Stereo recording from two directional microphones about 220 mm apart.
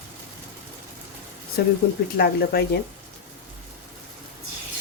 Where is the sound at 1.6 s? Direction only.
45° left (ahead or behind).